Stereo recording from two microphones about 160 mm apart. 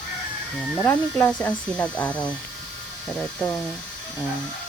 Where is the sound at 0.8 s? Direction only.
15° left (ahead or behind).